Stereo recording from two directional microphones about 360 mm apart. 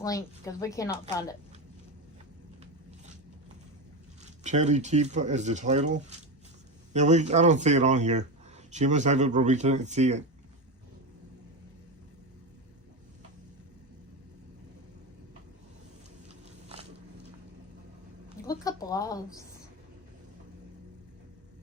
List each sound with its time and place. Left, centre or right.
0.0 s a woman's voice: centre
4.2 s speech: centre
18.4 s a sound: centre